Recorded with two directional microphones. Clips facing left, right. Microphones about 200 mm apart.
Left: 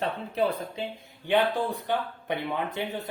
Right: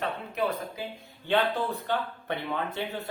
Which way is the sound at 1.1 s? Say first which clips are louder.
Left 2 dB; 15° left (ahead or behind).